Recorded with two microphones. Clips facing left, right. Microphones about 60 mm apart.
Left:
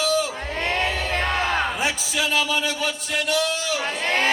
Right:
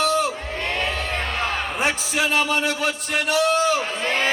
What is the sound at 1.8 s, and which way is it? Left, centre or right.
Speech, right.